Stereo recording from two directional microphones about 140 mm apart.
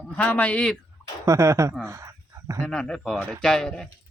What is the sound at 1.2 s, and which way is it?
Speech, 20° right (ahead or behind).